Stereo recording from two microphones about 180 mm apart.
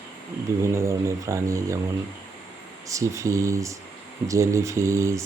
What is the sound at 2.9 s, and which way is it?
Speech, 15° right (ahead or behind).